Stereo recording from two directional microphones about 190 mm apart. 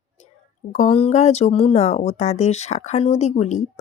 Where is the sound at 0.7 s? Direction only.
30° left (ahead or behind).